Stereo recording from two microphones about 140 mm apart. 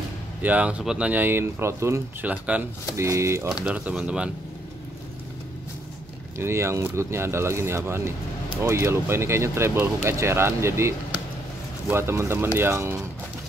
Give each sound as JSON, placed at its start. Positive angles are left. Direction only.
{"t": 0.4, "sound": "speech", "side_deg": -10}
{"t": 3.4, "sound": "speech", "side_deg": -5}
{"t": 6.3, "sound": "speech", "side_deg": -20}